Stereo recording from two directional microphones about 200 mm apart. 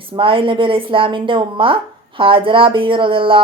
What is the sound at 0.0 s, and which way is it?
A woman's voice, 25° right (ahead or behind).